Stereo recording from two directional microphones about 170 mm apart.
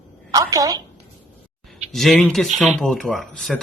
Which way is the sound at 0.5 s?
20° right (ahead or behind).